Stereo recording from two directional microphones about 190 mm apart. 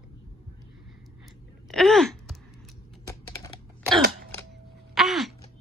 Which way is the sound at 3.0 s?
20° left (ahead or behind).